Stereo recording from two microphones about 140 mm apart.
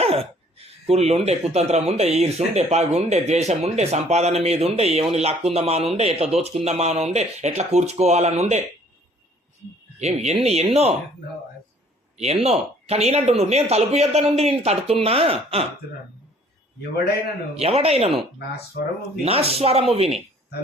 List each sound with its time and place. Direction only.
0.0 s speech: 45° right (ahead or behind)
10.0 s speech: 50° right (ahead or behind)
12.2 s speech: 50° right (ahead or behind)
17.6 s speech: 50° right (ahead or behind)
19.2 s speech: 45° right (ahead or behind)